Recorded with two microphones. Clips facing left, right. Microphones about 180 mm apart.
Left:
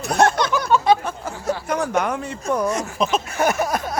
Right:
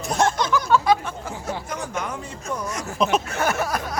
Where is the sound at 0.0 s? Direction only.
65° left (ahead or behind).